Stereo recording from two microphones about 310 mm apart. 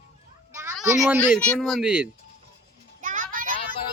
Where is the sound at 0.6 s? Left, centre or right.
Centre.